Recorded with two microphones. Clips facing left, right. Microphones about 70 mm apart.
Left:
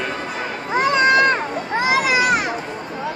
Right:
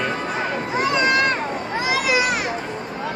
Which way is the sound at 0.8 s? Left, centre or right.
Left.